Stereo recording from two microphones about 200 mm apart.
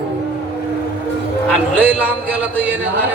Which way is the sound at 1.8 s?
10° right (ahead or behind).